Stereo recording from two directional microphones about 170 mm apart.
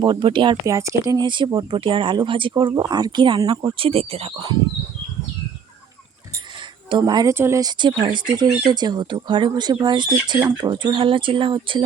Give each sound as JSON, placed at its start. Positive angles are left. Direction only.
{"t": 0.0, "sound": "speech", "side_deg": -25}
{"t": 0.6, "sound": "speech", "side_deg": -20}
{"t": 6.9, "sound": "speech", "side_deg": -25}